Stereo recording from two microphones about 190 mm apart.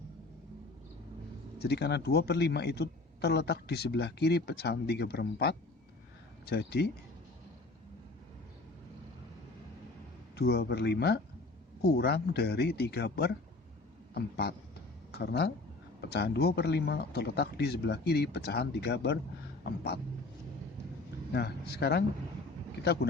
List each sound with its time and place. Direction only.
1.5 s speech: 60° left (ahead or behind)
10.3 s a man's voice: 55° left (ahead or behind)
21.3 s speech: 60° left (ahead or behind)